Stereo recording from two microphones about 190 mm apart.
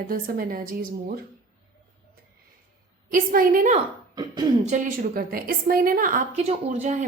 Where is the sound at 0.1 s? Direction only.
50° right (ahead or behind).